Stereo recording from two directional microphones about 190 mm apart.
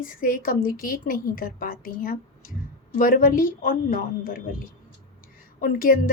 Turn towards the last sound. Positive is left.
turn(degrees=45)  # may be behind; listen again after turning